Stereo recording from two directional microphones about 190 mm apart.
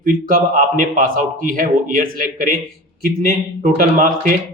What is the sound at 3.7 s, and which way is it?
Speech, 45° right (ahead or behind).